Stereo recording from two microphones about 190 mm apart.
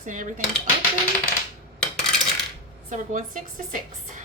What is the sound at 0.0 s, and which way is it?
Speech, 40° right (ahead or behind).